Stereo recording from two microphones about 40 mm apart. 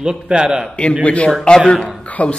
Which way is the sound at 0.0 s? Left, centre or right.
Right.